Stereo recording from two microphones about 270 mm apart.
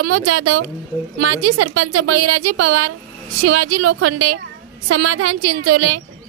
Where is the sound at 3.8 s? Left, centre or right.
Right.